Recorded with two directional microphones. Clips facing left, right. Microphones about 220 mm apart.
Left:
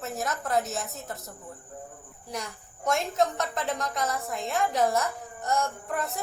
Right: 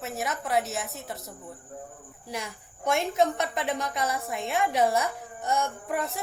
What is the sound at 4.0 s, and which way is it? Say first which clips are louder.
Speech: even; centre (ahead or behind).